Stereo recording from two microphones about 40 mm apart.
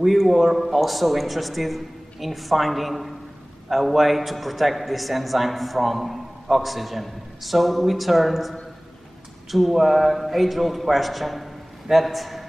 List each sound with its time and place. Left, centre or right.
0.0 s a man's voice: centre